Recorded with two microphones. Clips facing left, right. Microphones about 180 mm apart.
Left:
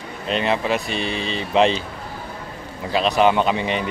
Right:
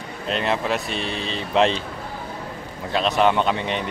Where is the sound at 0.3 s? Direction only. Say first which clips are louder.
Left 2 dB; centre (ahead or behind).